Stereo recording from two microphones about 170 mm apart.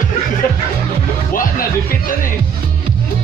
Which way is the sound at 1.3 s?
55° left (ahead or behind).